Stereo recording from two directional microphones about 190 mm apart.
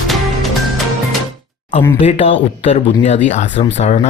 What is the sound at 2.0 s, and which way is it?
Speech, 30° left (ahead or behind).